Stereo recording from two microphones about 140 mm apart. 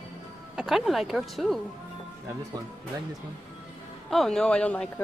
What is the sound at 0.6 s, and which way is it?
Speech, centre (ahead or behind).